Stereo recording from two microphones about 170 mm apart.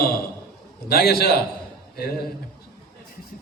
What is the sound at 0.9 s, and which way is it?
Speech, 65° left (ahead or behind).